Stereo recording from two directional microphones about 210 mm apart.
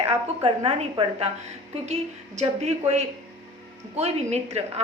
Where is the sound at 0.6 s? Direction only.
30° right (ahead or behind).